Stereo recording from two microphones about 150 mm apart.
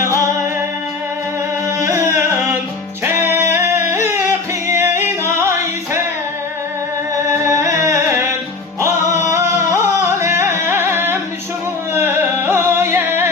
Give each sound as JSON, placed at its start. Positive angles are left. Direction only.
{"t": 1.8, "sound": "singing", "side_deg": -20}
{"t": 3.0, "sound": "music", "side_deg": -15}
{"t": 7.3, "sound": "music", "side_deg": -20}